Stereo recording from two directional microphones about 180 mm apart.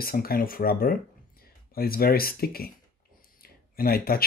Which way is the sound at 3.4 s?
55° left (ahead or behind).